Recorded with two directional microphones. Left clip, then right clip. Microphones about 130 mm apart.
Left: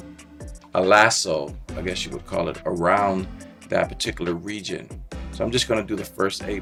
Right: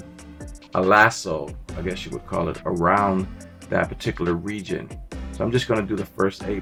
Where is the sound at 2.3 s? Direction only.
35° left (ahead or behind).